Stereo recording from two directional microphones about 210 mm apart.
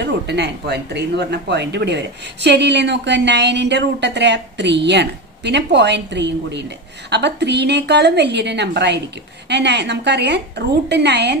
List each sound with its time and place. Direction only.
0.0 s a woman's voice: 55° right (ahead or behind)